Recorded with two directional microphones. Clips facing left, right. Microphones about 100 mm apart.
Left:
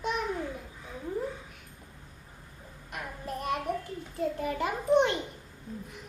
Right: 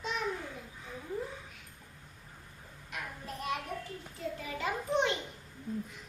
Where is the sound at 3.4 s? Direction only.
45° left (ahead or behind).